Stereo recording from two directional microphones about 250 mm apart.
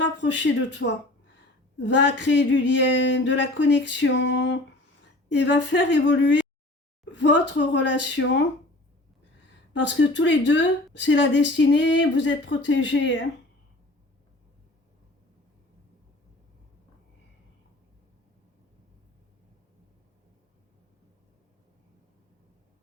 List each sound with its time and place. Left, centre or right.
0.0 s speech: left
10.0 s speech: left